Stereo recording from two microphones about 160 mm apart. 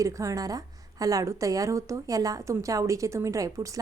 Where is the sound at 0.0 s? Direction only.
20° right (ahead or behind).